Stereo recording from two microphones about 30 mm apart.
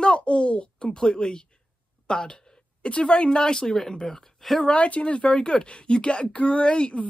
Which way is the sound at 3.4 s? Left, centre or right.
Left.